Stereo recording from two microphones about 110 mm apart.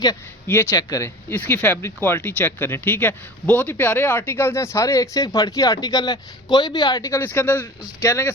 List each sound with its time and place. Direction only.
0.4 s speech: 20° left (ahead or behind)
0.7 s speech: 35° left (ahead or behind)
7.2 s speech: 20° left (ahead or behind)